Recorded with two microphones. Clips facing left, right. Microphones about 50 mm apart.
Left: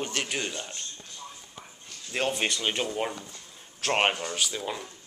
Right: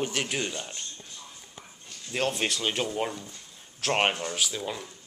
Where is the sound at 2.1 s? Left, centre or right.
Centre.